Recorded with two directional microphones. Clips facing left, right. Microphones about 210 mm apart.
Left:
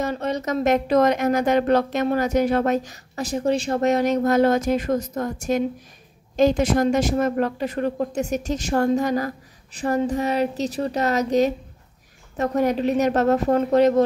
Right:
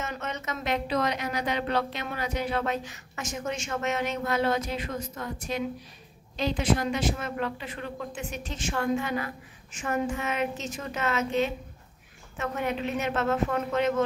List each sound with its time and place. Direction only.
0.0 s a woman's voice: 35° left (ahead or behind)